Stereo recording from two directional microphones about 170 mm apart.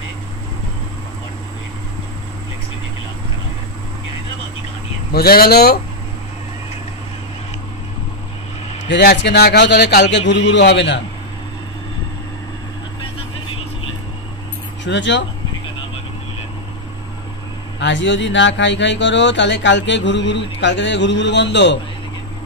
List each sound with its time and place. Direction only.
5.1 s speech: 65° left (ahead or behind)
8.8 s speech: 90° left
14.9 s speech: 90° left
17.7 s speech: 90° left